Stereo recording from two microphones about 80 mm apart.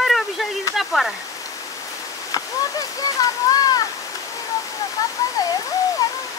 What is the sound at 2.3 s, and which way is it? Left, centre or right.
Speech, left.